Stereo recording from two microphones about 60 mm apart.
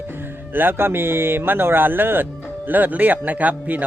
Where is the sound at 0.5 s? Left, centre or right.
Right.